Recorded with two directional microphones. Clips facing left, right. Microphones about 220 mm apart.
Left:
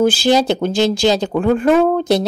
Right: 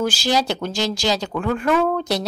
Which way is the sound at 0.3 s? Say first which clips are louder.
Left 7 dB; 25° left (ahead or behind).